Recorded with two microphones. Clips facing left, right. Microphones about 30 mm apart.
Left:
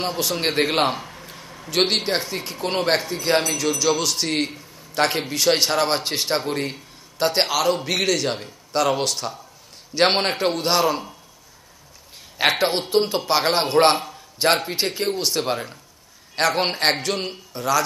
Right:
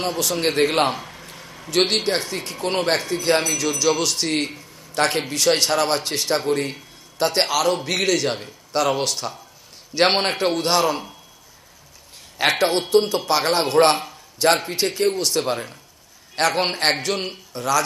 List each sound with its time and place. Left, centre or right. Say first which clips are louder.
0.4 s a man's voice: right 2 dB; centre
12.4 s a man's voice: right 1 dB; centre